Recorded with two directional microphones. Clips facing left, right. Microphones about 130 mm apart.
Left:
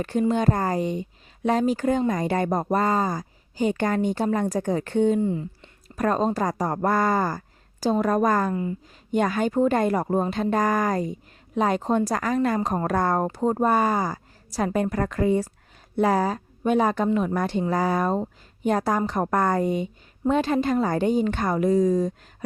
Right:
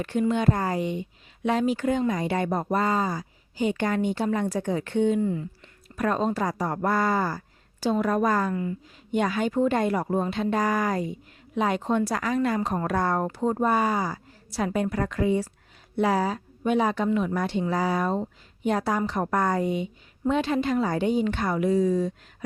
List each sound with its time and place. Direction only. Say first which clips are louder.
0.0 s speech: left 2 dB; 40° left (ahead or behind)
5.2 s speech: left 2 dB; 25° left (ahead or behind)
6.0 s speech: left 2 dB; 40° left (ahead or behind)